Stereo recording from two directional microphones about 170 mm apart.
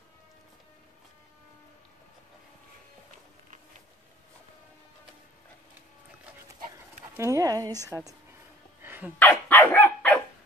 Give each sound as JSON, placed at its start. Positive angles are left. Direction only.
{"t": 7.2, "sound": "speech", "side_deg": -20}
{"t": 8.8, "sound": "dog", "side_deg": -10}
{"t": 9.2, "sound": "dog", "side_deg": 10}